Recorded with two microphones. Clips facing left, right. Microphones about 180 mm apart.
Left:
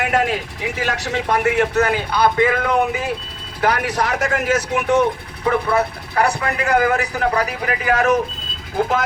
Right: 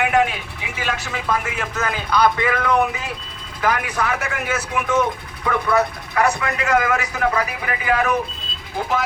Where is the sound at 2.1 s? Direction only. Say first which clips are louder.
Even; 25° left (ahead or behind).